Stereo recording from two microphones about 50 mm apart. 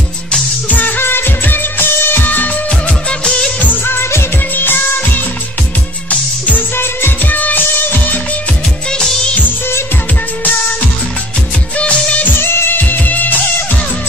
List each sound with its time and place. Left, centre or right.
0.7 s music: left
3.1 s music of bollywood: centre
3.7 s music: left
4.6 s music: left
6.0 s music: left
6.8 s music: left
7.2 s music: left
11.7 s music: left
12.4 s music of bollywood: left
12.8 s music: left